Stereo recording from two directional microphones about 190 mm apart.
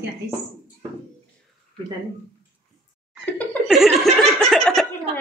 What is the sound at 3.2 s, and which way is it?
Laughter, 10° left (ahead or behind).